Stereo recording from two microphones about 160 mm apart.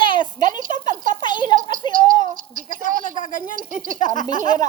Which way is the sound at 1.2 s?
30° left (ahead or behind).